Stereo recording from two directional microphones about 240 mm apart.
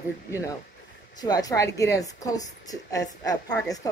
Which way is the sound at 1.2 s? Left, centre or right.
Centre.